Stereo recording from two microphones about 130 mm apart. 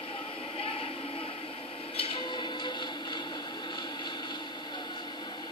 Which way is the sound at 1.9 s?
45° left (ahead or behind).